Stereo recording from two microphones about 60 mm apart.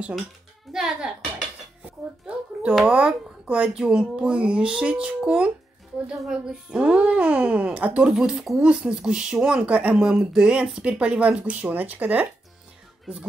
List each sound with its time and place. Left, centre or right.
0.7 s speech: centre
2.9 s speech: centre
9.9 s speech: centre; by 12.3 s right